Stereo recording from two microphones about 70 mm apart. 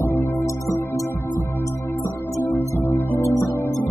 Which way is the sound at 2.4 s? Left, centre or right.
Left.